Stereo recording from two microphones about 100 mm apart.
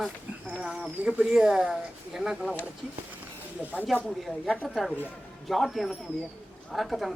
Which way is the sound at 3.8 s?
5° right (ahead or behind).